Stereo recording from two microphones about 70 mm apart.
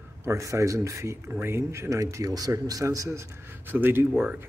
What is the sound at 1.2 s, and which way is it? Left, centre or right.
Speech, right.